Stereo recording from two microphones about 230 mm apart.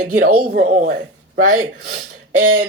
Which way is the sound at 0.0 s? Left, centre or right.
Right.